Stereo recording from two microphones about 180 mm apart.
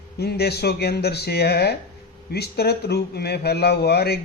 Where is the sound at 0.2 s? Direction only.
65° left (ahead or behind).